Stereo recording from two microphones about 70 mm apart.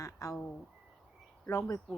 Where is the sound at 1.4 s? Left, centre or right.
Left.